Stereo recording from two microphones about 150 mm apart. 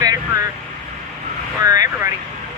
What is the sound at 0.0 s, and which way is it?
Vehicle, 25° right (ahead or behind).